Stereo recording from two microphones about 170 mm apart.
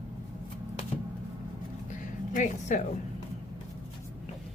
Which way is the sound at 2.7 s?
45° left (ahead or behind).